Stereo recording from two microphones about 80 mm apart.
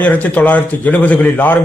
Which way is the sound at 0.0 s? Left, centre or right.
Left.